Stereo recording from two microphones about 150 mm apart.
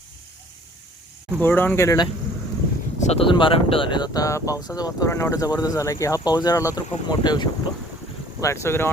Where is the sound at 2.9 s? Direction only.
45° left (ahead or behind).